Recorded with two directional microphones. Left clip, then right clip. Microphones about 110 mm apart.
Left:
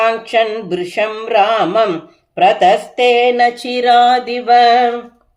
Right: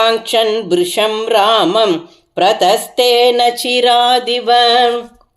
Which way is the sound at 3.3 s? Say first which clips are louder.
Right 1 dB; 20° right (ahead or behind).